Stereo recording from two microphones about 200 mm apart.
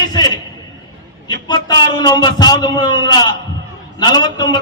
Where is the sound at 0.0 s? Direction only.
20° left (ahead or behind).